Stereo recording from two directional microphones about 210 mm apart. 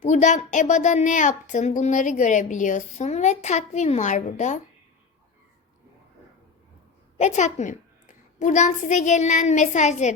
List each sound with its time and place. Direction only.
0.0 s a woman's voice: 35° left (ahead or behind)
7.2 s a child's voice: 35° left (ahead or behind)